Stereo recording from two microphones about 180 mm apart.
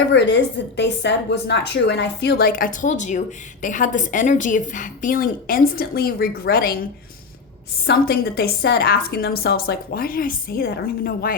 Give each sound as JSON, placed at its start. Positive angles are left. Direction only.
{"t": 0.1, "sound": "a woman's voice", "side_deg": 75}
{"t": 7.9, "sound": "a woman's voice", "side_deg": 60}